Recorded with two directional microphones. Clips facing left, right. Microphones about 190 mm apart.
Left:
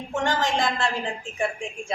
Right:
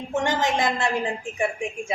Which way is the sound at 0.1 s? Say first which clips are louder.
Right 1 dB; 20° right (ahead or behind).